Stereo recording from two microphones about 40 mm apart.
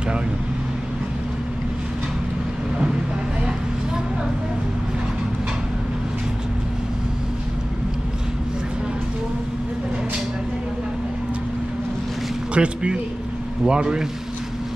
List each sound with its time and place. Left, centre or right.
12.5 s speech: right